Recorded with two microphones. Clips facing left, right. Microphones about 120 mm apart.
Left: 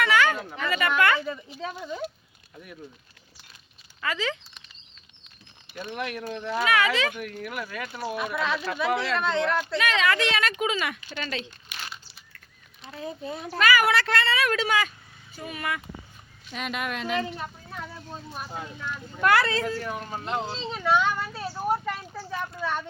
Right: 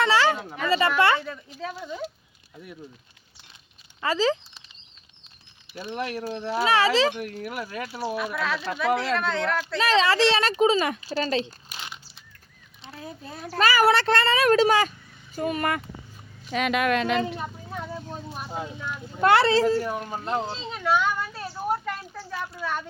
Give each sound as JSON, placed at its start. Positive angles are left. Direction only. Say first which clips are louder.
{"t": 0.0, "sound": "speech", "louder": "right 2 dB", "side_deg": -30}
{"t": 1.2, "sound": "speech", "louder": "left 2 dB", "side_deg": 5}
{"t": 4.0, "sound": "speech", "louder": "right 7 dB", "side_deg": -30}
{"t": 5.9, "sound": "speech", "louder": "right 3 dB", "side_deg": -35}
{"t": 8.1, "sound": "speech", "louder": "left 1 dB", "side_deg": 0}
{"t": 9.7, "sound": "speech", "louder": "right 6 dB", "side_deg": -30}
{"t": 12.9, "sound": "speech", "louder": "left 5 dB", "side_deg": 0}
{"t": 13.6, "sound": "speech", "louder": "right 2 dB", "side_deg": -35}
{"t": 16.5, "sound": "speech", "louder": "right 8 dB", "side_deg": -90}
{"t": 17.4, "sound": "a sound", "louder": "right 3 dB", "side_deg": -10}
{"t": 19.2, "sound": "speech", "louder": "right 4 dB", "side_deg": -30}
{"t": 19.8, "sound": "speech", "louder": "right 3 dB", "side_deg": -20}
{"t": 20.3, "sound": "a sound", "louder": "right 1 dB", "side_deg": -5}